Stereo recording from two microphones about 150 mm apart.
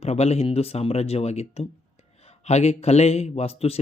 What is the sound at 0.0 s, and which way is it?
Speech, 45° left (ahead or behind).